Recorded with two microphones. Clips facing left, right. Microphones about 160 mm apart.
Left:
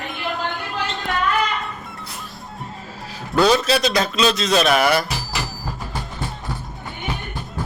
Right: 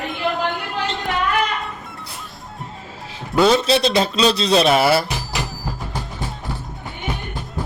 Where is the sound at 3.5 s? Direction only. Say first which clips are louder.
Right 2 dB; 30° right (ahead or behind).